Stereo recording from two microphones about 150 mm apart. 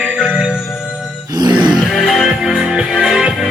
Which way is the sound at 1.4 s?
30° right (ahead or behind).